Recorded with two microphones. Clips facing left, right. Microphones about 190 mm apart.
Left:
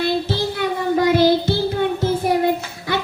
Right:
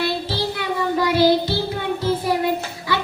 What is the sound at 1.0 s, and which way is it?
Child singing, 50° left (ahead or behind).